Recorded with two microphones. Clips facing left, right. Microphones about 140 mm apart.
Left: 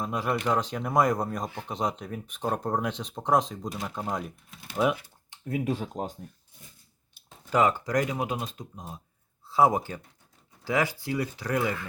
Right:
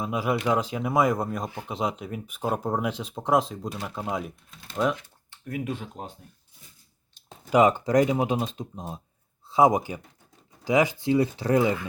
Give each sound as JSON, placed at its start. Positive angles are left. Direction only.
{"t": 0.0, "sound": "speech", "side_deg": -10}
{"t": 5.3, "sound": "speech", "side_deg": 25}
{"t": 7.5, "sound": "speech", "side_deg": -20}
{"t": 9.5, "sound": "speech", "side_deg": -15}